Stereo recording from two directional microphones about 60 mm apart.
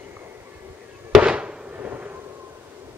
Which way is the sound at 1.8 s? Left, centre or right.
Right.